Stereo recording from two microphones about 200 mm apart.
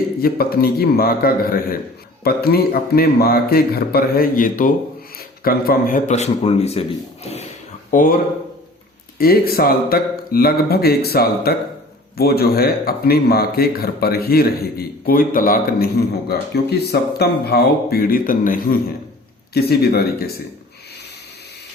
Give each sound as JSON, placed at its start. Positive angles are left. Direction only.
{"t": 0.2, "sound": "a man's voice", "side_deg": 50}
{"t": 7.9, "sound": "a man's voice", "side_deg": 40}